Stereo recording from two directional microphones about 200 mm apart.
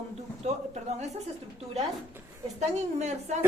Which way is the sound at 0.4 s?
35° right (ahead or behind).